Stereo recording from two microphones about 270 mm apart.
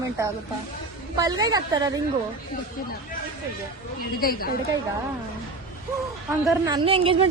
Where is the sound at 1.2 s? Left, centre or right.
Centre.